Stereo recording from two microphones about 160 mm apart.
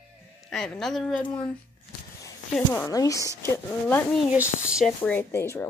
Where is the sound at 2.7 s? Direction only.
20° left (ahead or behind).